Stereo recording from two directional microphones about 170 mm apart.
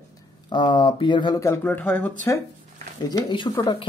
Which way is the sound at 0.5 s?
25° left (ahead or behind).